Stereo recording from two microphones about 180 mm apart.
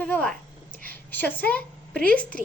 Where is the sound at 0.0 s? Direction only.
5° left (ahead or behind).